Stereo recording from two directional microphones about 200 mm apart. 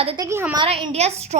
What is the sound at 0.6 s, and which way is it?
Speech, 25° right (ahead or behind).